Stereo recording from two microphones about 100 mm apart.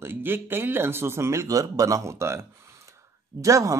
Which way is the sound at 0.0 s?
20° right (ahead or behind).